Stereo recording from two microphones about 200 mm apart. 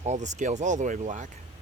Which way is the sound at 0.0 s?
35° right (ahead or behind).